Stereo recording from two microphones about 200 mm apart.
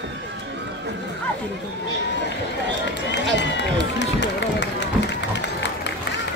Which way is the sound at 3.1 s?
60° left (ahead or behind).